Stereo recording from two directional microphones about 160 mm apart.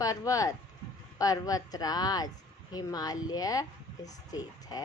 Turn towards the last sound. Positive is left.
turn(degrees=25)  # may be behind; listen again after turning